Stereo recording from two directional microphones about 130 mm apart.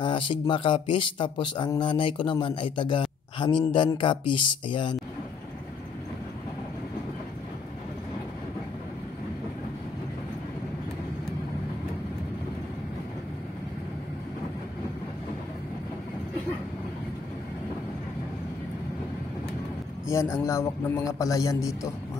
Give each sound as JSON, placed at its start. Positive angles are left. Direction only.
{"t": 0.0, "sound": "speech", "side_deg": 40}
{"t": 20.1, "sound": "a man's voice", "side_deg": 20}